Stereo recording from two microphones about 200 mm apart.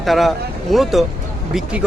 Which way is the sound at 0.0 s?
Centre (ahead or behind).